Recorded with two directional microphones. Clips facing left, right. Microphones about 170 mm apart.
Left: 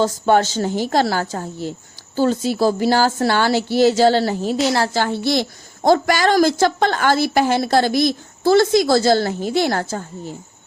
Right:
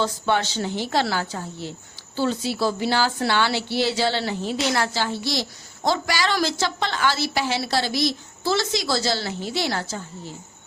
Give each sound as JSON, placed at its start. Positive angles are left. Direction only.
{"t": 0.0, "sound": "a woman's voice", "side_deg": 45}
{"t": 4.9, "sound": "a woman's voice", "side_deg": 55}